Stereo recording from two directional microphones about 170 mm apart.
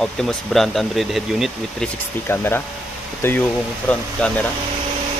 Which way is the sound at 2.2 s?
15° left (ahead or behind).